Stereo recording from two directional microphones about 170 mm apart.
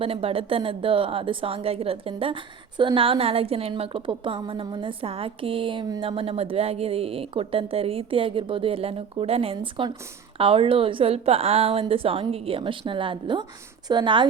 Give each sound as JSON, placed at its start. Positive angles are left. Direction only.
{"t": 0.0, "sound": "a woman's voice", "side_deg": -35}